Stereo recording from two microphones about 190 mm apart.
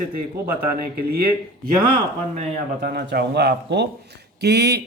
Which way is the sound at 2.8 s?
55° right (ahead or behind).